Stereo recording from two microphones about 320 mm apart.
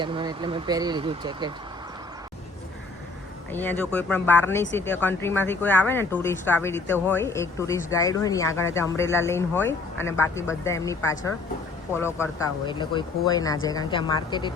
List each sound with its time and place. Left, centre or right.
0.0 s speech: centre
3.5 s speech: centre